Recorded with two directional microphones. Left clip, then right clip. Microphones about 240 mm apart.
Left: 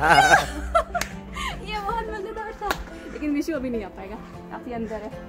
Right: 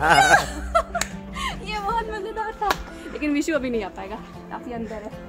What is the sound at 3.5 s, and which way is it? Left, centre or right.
Speech, right.